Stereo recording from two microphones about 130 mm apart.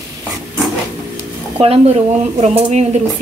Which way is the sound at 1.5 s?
50° right (ahead or behind).